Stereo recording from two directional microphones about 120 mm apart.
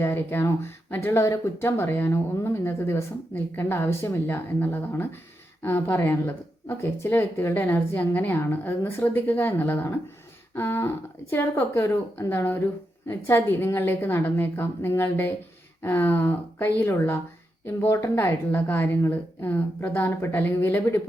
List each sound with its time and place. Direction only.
0.0 s speech: 20° left (ahead or behind)